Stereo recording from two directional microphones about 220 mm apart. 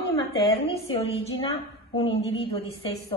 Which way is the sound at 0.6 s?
25° left (ahead or behind).